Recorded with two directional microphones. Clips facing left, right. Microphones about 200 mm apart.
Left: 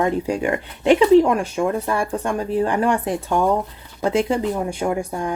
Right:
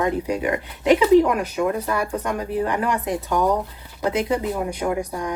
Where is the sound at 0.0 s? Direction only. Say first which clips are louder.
Left 2 dB; 30° left (ahead or behind).